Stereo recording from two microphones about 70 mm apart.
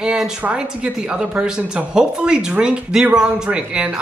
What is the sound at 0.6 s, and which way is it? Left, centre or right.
Speech, centre.